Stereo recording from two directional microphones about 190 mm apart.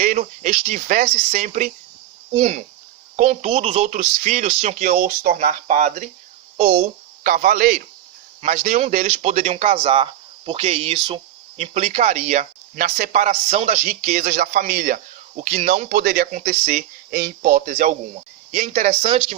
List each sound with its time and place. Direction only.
0.0 s speech: 40° right (ahead or behind)
7.3 s speech: 45° right (ahead or behind)
12.8 s speech: 50° right (ahead or behind)
13.3 s speech: 35° right (ahead or behind)
15.9 s speech: 50° right (ahead or behind)
17.1 s speech: 55° right (ahead or behind); by 19.4 s 35° right (ahead or behind)